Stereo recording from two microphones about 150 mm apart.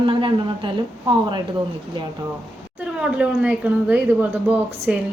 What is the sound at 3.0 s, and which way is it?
A woman's voice, 10° right (ahead or behind).